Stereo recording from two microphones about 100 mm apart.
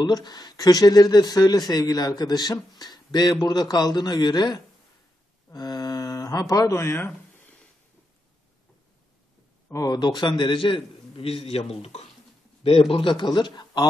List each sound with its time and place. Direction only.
0.0 s speech: 45° left (ahead or behind); by 7.1 s 25° left (ahead or behind)
9.7 s a man's voice: 35° left (ahead or behind); by 12.1 s 85° left
12.9 s speech: 55° left (ahead or behind)